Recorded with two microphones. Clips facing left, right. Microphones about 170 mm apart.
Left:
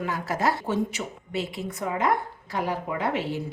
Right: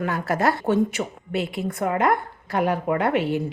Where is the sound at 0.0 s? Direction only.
60° right (ahead or behind).